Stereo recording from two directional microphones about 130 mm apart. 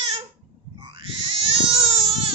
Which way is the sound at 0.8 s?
40° right (ahead or behind).